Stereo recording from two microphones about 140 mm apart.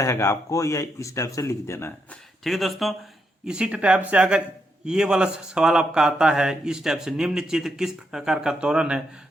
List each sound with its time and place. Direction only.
0.0 s speech: 20° left (ahead or behind)
2.4 s speech: centre (ahead or behind)